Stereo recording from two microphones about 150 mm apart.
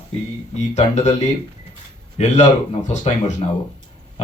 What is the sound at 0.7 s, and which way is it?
Speech, 50° left (ahead or behind).